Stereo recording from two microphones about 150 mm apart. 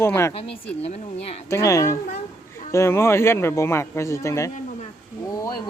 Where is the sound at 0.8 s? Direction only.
45° left (ahead or behind).